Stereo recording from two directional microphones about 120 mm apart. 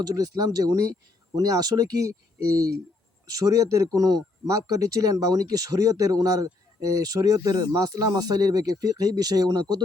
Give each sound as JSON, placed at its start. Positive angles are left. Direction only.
{"t": 0.0, "sound": "speech", "side_deg": -30}
{"t": 3.3, "sound": "speech", "side_deg": -30}